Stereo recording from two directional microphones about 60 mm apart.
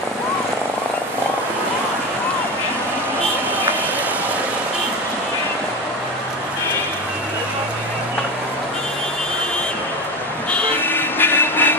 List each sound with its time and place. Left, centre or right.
10.8 s vehicle: left